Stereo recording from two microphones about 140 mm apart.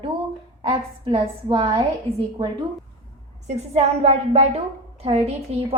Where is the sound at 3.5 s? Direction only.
50° right (ahead or behind).